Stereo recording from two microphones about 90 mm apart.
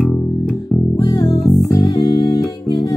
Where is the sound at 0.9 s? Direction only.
40° left (ahead or behind).